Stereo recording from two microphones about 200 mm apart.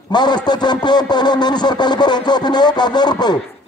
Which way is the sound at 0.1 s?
20° left (ahead or behind).